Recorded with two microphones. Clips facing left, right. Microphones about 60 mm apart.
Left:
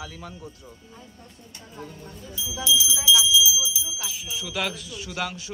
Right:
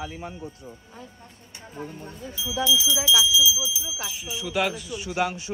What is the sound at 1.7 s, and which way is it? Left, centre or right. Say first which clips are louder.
Speech: right 3 dB; right.